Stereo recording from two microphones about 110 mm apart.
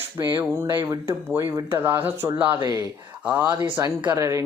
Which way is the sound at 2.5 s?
35° right (ahead or behind).